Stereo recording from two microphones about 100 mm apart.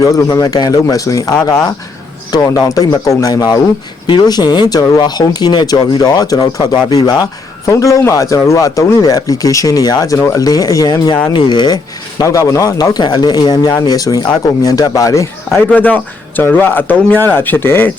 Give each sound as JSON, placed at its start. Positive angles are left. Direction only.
{"t": 0.0, "sound": "speech", "side_deg": 35}
{"t": 12.2, "sound": "speech", "side_deg": 35}
{"t": 15.7, "sound": "speech", "side_deg": 15}